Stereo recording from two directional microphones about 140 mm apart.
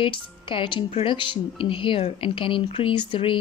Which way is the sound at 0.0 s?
40° left (ahead or behind).